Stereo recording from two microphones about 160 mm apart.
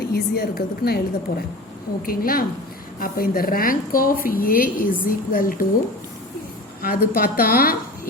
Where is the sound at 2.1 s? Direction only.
65° left (ahead or behind).